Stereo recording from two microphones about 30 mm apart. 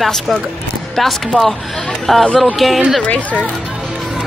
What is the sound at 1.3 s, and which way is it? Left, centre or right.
Speech, left.